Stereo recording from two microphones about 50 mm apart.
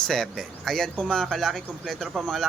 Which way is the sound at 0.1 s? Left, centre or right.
Centre.